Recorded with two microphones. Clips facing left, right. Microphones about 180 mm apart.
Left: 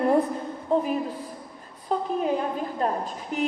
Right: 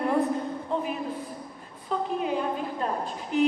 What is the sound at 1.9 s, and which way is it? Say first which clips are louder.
Speech: left 2 dB; 35° left (ahead or behind).